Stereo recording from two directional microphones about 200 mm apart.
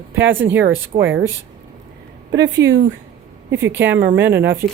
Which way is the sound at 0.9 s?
30° right (ahead or behind).